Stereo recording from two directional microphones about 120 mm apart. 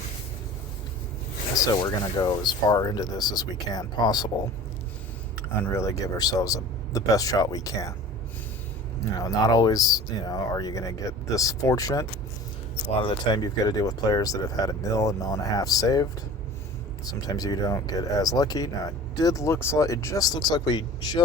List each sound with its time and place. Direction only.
1.5 s speech: 30° left (ahead or behind)
5.7 s speech: 25° left (ahead or behind)
9.2 s speech: 30° left (ahead or behind)
17.1 s speech: 30° left (ahead or behind)